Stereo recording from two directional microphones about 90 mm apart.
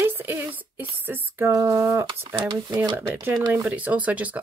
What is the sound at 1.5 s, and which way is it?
Speech, 35° right (ahead or behind).